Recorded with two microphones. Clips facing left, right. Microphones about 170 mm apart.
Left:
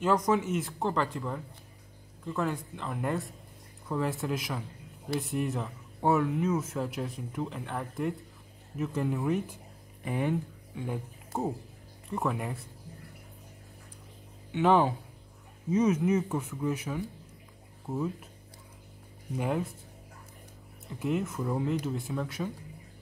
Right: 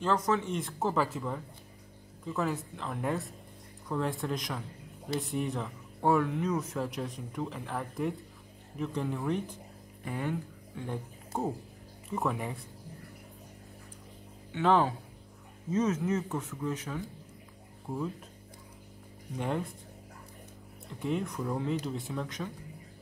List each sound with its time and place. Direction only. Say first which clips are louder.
0.0 s speech: left 3 dB; 15° left (ahead or behind)
10.0 s speech: left 4 dB; 20° left (ahead or behind)
10.9 s speech: left 1 dB; centre (ahead or behind)
14.5 s speech: left 2 dB; 15° left (ahead or behind)
19.3 s speech: left 2 dB; 5° left (ahead or behind)
21.0 s speech: left 2 dB; 5° left (ahead or behind)